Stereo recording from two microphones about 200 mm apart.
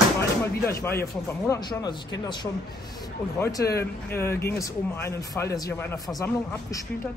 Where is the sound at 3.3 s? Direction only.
15° left (ahead or behind).